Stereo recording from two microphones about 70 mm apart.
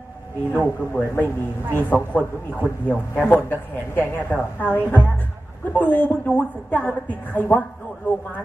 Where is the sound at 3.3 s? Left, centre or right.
Left.